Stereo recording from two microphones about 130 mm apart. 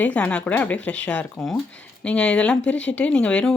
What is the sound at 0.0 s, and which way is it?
Speech, 10° left (ahead or behind).